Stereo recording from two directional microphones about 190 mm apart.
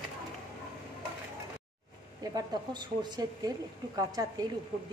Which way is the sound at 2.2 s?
20° right (ahead or behind).